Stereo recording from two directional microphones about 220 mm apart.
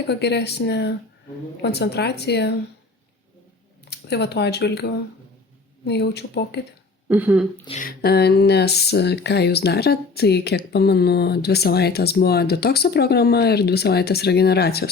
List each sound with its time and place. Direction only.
0.1 s speech: 50° left (ahead or behind)
3.8 s speech: 50° left (ahead or behind)
7.1 s speech: 10° right (ahead or behind)
7.8 s speech: 45° left (ahead or behind)